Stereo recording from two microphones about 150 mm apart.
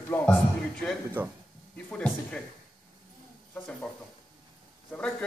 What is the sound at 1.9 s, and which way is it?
Speech, 5° left (ahead or behind).